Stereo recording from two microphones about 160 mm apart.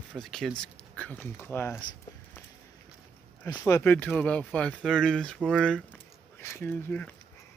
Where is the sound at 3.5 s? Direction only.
15° left (ahead or behind).